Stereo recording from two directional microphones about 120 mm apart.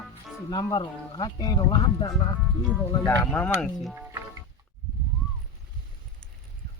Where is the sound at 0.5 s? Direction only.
35° left (ahead or behind).